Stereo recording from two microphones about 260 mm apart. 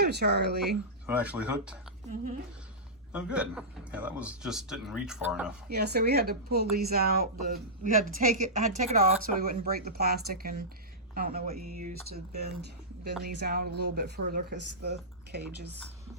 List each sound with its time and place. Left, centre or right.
0.0 s speech: right
1.0 s a man's voice: centre
3.1 s a man's voice: centre
5.6 s a woman's voice: right